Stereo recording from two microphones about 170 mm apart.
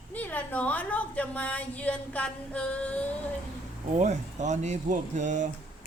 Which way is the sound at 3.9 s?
45° right (ahead or behind).